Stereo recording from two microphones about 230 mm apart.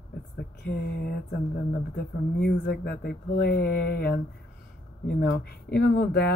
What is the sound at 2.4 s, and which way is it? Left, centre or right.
Speech, left.